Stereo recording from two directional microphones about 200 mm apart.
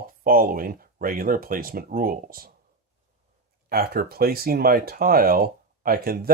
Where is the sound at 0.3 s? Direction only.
45° right (ahead or behind).